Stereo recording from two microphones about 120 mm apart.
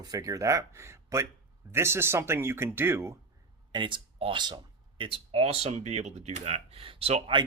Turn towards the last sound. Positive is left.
turn(degrees=-55)  # may be behind; listen again after turning